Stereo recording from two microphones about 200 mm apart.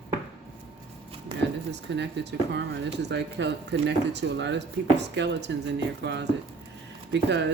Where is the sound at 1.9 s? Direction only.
60° right (ahead or behind).